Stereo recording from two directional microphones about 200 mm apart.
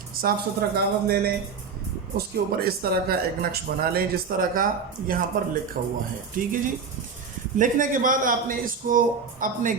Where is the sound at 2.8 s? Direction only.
50° right (ahead or behind).